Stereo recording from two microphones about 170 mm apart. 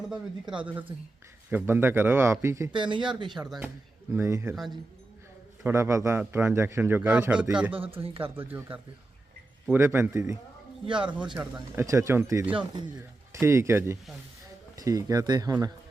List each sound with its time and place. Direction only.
0.6 s a man's voice: 10° right (ahead or behind)
2.7 s speech: 30° right (ahead or behind)
4.1 s a man's voice: 15° right (ahead or behind)
5.6 s a man's voice: 15° right (ahead or behind)
7.8 s speech: 30° right (ahead or behind)
8.2 s a man's voice: 10° right (ahead or behind)
10.8 s speech: 30° right (ahead or behind)
11.3 s a man's voice: 10° right (ahead or behind)